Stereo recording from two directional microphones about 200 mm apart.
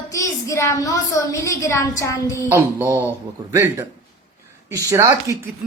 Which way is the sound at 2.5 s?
15° right (ahead or behind).